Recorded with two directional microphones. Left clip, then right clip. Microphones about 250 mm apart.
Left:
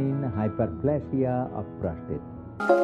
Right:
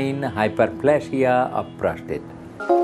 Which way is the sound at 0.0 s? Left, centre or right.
Centre.